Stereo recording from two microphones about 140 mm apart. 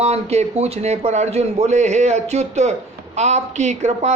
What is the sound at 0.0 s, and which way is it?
Speech, 50° right (ahead or behind).